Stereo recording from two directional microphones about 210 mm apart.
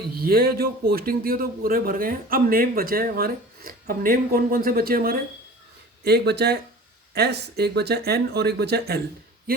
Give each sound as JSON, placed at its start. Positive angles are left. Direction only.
{"t": 0.2, "sound": "speech", "side_deg": -45}